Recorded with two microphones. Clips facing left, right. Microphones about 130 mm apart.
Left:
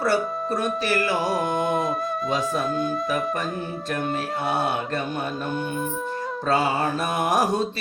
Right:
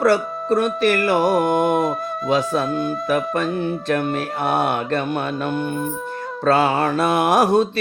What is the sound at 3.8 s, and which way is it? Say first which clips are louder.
Speech: right 2 dB; 70° right (ahead or behind).